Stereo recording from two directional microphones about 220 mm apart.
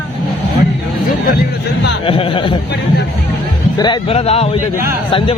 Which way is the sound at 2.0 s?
25° left (ahead or behind).